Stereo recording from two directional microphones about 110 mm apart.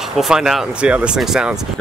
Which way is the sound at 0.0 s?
5° right (ahead or behind).